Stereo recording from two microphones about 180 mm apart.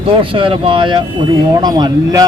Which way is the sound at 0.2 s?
30° right (ahead or behind).